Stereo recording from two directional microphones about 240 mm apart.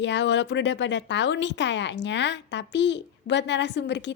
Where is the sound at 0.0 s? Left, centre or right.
Left.